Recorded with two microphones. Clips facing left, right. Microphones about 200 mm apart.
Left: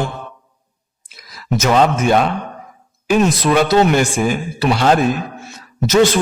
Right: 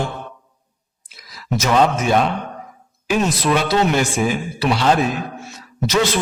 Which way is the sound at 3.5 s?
45° left (ahead or behind).